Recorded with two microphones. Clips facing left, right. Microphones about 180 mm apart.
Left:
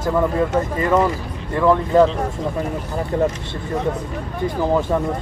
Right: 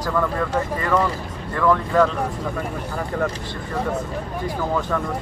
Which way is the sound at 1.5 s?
20° left (ahead or behind).